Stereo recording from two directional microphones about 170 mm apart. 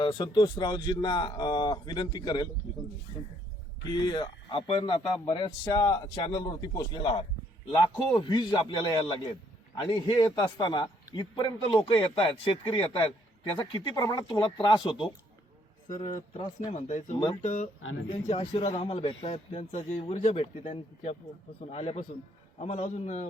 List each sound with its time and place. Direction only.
0.0 s a man's voice: 25° left (ahead or behind)
3.9 s a man's voice: 25° left (ahead or behind)
16.7 s a man's voice: 45° left (ahead or behind)